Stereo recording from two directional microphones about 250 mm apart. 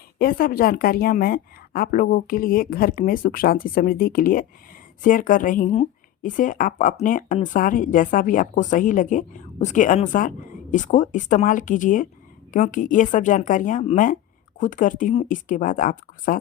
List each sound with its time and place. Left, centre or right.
0.2 s speech: left